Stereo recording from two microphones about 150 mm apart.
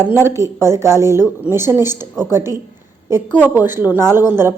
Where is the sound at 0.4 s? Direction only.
20° right (ahead or behind).